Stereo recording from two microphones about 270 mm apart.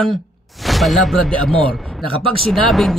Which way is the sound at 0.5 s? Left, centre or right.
Centre.